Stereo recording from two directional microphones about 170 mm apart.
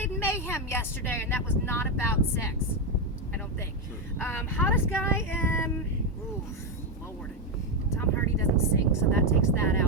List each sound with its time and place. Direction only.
0.0 s speech: 15° left (ahead or behind)
4.2 s speech: 10° left (ahead or behind)
7.9 s speech: 15° left (ahead or behind)